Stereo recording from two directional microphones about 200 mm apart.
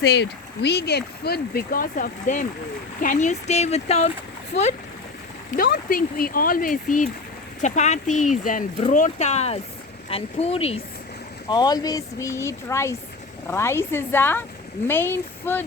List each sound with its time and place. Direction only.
0.0 s speech: 55° left (ahead or behind); by 4.1 s 35° left (ahead or behind)
4.5 s speech: 60° left (ahead or behind)
5.5 s speech: 50° left (ahead or behind); by 15.6 s 10° left (ahead or behind)